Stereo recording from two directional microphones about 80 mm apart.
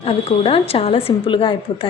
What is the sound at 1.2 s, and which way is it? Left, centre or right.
Speech, left.